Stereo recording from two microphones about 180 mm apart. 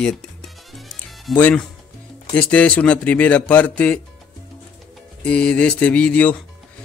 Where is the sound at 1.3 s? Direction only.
10° left (ahead or behind).